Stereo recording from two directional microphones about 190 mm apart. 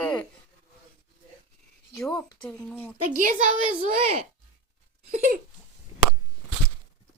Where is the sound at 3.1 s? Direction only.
45° right (ahead or behind).